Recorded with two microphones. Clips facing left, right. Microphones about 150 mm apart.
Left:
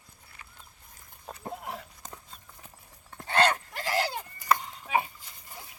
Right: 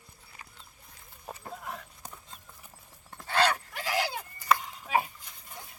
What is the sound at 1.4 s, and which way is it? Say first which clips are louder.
Horse: left 4 dB; 30° left (ahead or behind).